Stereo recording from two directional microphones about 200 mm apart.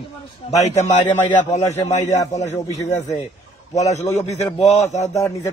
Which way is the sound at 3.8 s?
35° left (ahead or behind).